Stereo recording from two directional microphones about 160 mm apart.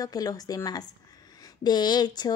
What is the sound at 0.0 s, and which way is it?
Speech, 25° left (ahead or behind).